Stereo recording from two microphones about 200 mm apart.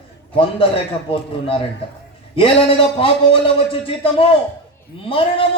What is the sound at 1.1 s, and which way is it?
Speech, 25° left (ahead or behind).